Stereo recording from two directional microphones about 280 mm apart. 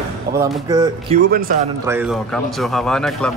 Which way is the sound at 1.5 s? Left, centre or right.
Right.